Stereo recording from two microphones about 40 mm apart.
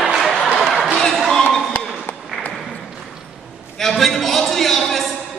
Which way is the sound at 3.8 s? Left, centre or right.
Centre.